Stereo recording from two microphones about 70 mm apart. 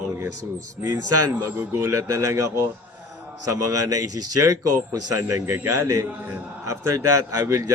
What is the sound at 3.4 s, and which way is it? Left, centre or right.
A man's voice, right.